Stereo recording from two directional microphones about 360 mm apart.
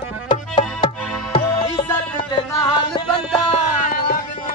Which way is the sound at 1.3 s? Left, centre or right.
Centre.